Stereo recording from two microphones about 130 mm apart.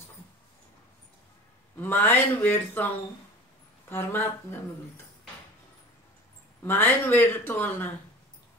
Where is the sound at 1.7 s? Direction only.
15° left (ahead or behind).